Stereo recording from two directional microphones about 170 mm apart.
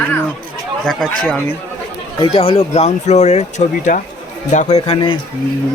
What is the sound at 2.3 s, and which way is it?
Speech, 35° left (ahead or behind).